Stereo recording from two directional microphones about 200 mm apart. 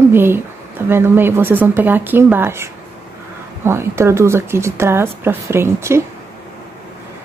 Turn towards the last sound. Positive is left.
turn(degrees=-10)  # may be behind; listen again after turning